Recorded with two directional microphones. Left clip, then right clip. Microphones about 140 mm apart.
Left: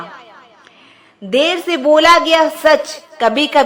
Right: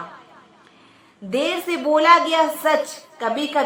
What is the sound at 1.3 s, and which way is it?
A woman's voice, 35° left (ahead or behind).